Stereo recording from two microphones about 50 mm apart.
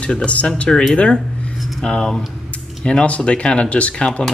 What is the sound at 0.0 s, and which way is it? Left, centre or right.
Speech, left.